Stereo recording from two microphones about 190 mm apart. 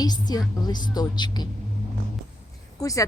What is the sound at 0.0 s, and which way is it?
A woman's voice, 20° left (ahead or behind).